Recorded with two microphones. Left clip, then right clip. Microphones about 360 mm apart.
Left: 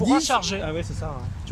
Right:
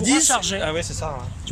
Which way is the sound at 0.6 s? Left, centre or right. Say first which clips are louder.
Right 5 dB; right.